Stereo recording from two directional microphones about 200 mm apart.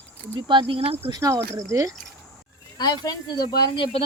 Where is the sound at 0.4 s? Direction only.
25° right (ahead or behind).